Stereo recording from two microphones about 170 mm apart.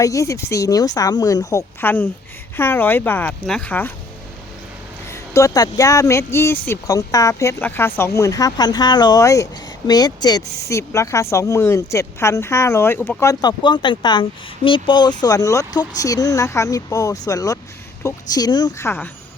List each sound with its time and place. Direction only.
0.0 s speech: 20° left (ahead or behind)
5.1 s speech: 15° left (ahead or behind)